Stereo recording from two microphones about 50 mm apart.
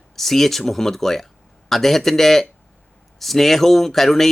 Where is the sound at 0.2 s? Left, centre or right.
Centre.